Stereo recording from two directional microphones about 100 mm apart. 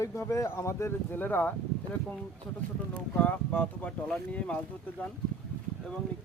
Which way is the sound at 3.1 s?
15° left (ahead or behind).